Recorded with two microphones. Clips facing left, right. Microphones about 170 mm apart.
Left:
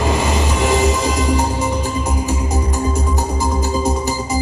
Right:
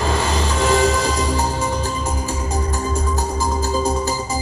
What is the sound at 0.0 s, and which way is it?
Music, 15° left (ahead or behind).